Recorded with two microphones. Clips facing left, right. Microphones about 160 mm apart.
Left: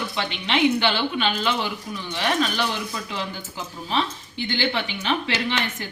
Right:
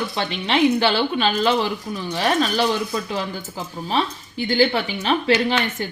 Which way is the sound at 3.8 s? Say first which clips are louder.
Right 2 dB; 40° right (ahead or behind).